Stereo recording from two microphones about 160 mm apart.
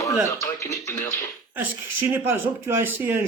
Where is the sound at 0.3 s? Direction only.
20° left (ahead or behind).